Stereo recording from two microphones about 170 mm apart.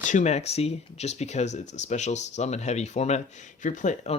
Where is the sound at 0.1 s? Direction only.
45° left (ahead or behind).